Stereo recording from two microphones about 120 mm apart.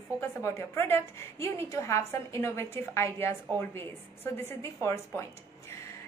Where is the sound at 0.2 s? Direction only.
25° left (ahead or behind).